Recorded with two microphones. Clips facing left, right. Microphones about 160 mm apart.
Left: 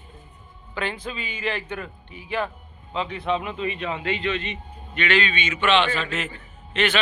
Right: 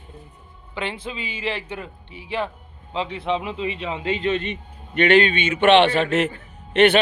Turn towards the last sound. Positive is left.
turn(degrees=-65)  # may be behind; listen again after turning